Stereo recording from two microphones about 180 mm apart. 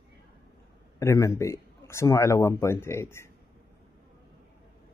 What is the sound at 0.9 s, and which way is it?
A man's voice, 15° left (ahead or behind).